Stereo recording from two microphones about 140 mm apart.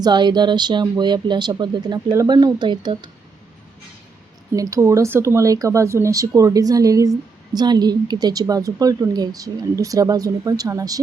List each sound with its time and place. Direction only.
0.0 s speech: 30° right (ahead or behind)
4.5 s speech: 25° right (ahead or behind)